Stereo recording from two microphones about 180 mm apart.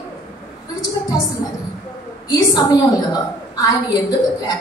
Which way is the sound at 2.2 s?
20° left (ahead or behind).